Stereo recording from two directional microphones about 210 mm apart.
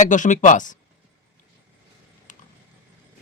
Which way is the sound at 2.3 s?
35° left (ahead or behind).